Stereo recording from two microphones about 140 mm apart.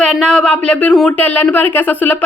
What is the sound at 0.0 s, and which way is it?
A woman's voice, 5° left (ahead or behind).